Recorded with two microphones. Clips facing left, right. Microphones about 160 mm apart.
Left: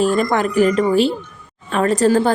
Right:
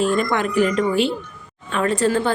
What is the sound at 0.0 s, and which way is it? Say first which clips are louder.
A woman's voice: left 3 dB; 40° left (ahead or behind).